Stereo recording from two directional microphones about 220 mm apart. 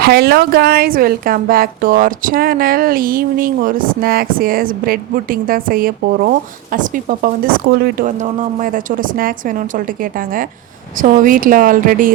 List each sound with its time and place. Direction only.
0.0 s a woman's voice: 45° right (ahead or behind)